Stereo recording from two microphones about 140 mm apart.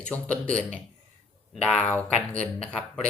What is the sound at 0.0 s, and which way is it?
Speech, 10° left (ahead or behind).